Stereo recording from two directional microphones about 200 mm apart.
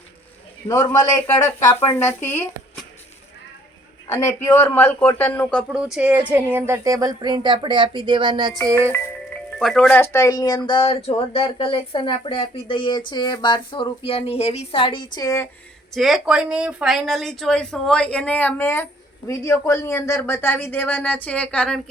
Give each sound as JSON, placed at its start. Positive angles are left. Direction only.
{"t": 0.7, "sound": "speech", "side_deg": 15}
{"t": 4.0, "sound": "speech", "side_deg": 15}
{"t": 5.7, "sound": "speech", "side_deg": -5}
{"t": 8.9, "sound": "speech", "side_deg": 5}
{"t": 16.0, "sound": "speech", "side_deg": 0}